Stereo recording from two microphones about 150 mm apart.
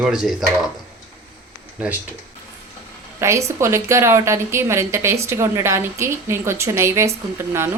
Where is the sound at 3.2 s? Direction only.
20° right (ahead or behind).